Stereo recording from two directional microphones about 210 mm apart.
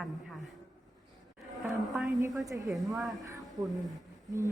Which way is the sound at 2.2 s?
15° right (ahead or behind).